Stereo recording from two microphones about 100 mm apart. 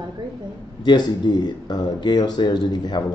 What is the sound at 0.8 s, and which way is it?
Speech, 50° left (ahead or behind).